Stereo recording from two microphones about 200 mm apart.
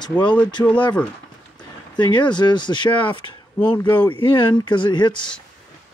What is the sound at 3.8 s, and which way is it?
Speech, 10° left (ahead or behind).